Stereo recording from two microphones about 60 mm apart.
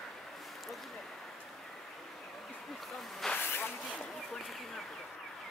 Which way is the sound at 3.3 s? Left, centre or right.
Left.